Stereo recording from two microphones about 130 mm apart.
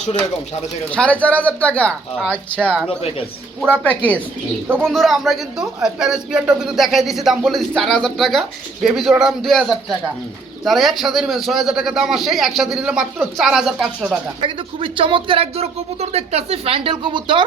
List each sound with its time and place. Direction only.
0.9 s speech: 10° left (ahead or behind)
3.8 s speech: 10° left (ahead or behind)
4.8 s a man's voice: centre (ahead or behind)
14.4 s speech: 40° right (ahead or behind)